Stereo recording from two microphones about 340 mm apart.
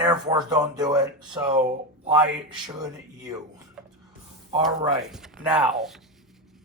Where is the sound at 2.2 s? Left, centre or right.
Centre.